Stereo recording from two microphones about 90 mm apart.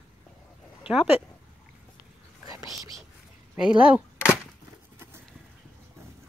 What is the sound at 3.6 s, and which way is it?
Speech, 10° right (ahead or behind).